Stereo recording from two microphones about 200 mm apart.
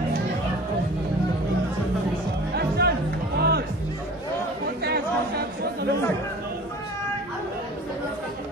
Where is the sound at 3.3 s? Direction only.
55° right (ahead or behind).